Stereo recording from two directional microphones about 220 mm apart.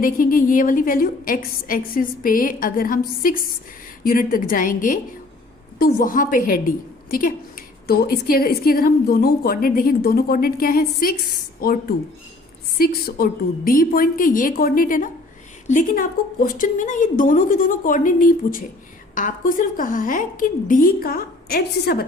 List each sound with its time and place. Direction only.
0.0 s a woman's voice: 40° left (ahead or behind)